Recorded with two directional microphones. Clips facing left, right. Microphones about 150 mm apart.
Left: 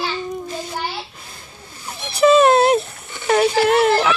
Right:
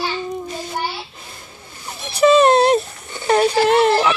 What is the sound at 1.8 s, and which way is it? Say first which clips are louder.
Speech: even; centre (ahead or behind).